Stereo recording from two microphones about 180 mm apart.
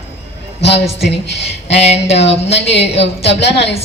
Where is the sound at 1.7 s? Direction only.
35° left (ahead or behind).